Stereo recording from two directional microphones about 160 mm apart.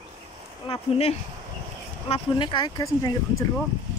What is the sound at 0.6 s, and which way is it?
Speech, 40° left (ahead or behind).